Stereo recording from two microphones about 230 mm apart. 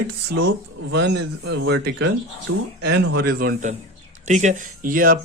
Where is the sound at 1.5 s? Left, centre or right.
Right.